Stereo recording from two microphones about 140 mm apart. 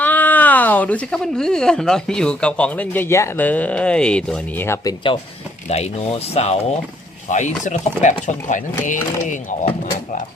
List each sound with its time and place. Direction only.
0.0 s speech: 10° left (ahead or behind)
4.6 s speech: 20° left (ahead or behind)
5.6 s speech: 50° left (ahead or behind)
7.3 s speech: 60° left (ahead or behind)